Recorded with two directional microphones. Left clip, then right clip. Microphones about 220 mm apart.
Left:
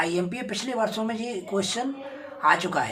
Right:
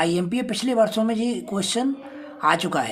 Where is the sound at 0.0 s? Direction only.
55° right (ahead or behind).